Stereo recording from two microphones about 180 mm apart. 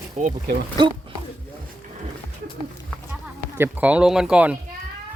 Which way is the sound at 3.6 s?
10° right (ahead or behind).